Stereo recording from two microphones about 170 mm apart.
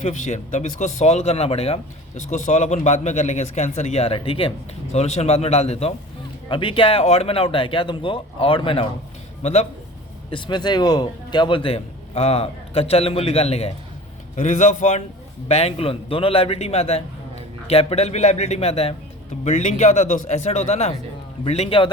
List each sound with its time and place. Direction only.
0.0 s speech: 45° left (ahead or behind)
10.3 s speech: 25° left (ahead or behind)